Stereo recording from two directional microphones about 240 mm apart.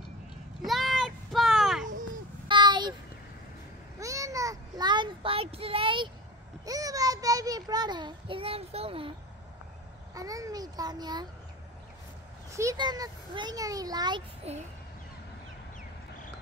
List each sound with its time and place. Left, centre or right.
0.7 s a sound: centre
2.4 s a sound: centre
4.0 s child singing: centre
6.6 s a child's voice: centre
10.1 s a child's voice: centre
12.4 s a child's voice: centre